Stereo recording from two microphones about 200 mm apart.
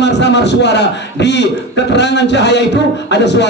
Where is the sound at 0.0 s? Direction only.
60° left (ahead or behind).